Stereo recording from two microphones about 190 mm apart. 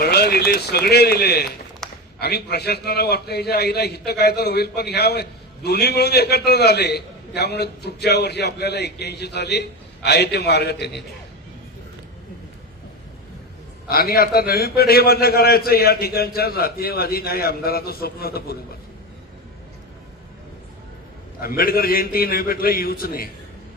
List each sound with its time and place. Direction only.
0.0 s a man's voice: 55° left (ahead or behind)
1.8 s a sound: centre (ahead or behind)
2.1 s a man's voice: 60° left (ahead or behind)
13.8 s a man's voice: 55° left (ahead or behind)
21.4 s a man's voice: 50° left (ahead or behind)